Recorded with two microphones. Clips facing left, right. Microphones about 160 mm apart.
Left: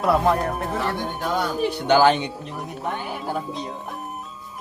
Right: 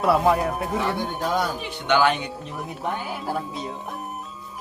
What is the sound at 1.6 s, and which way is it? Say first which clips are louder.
Speech: left 6 dB; 35° left (ahead or behind).